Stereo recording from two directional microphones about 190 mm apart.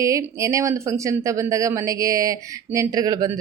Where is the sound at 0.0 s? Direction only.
15° right (ahead or behind).